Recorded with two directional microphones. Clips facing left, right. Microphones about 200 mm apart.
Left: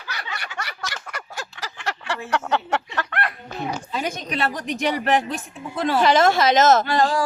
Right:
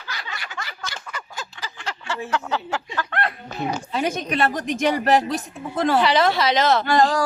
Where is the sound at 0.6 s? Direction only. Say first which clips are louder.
Left 2 dB; 70° left (ahead or behind).